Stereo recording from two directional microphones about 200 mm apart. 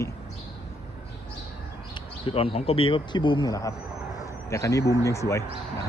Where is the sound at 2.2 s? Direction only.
30° left (ahead or behind).